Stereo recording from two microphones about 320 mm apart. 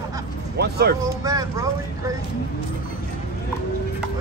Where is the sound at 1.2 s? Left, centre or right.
Centre.